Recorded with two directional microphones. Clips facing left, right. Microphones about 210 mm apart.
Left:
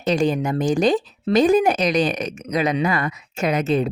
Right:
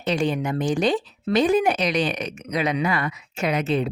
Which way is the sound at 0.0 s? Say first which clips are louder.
Left 3 dB; 40° left (ahead or behind).